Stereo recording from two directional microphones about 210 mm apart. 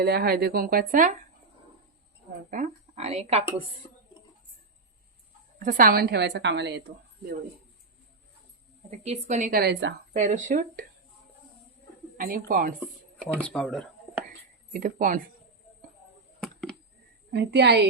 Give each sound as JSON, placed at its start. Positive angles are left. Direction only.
{"t": 0.0, "sound": "a woman's voice", "side_deg": -50}
{"t": 2.5, "sound": "speech", "side_deg": -35}
{"t": 5.5, "sound": "a woman's voice", "side_deg": -40}
{"t": 8.9, "sound": "a woman's voice", "side_deg": -30}
{"t": 10.2, "sound": "a woman's voice", "side_deg": -35}
{"t": 12.1, "sound": "speech", "side_deg": -40}
{"t": 12.8, "sound": "speech", "side_deg": -5}
{"t": 14.7, "sound": "a woman's voice", "side_deg": -40}
{"t": 17.3, "sound": "a woman's voice", "side_deg": -50}